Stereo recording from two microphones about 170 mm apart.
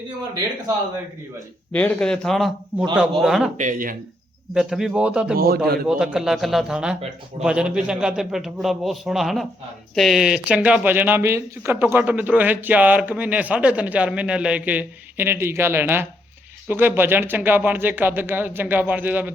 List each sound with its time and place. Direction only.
1.7 s a man's voice: 5° left (ahead or behind)
3.6 s speech: 50° right (ahead or behind)
4.5 s a man's voice: 5° right (ahead or behind)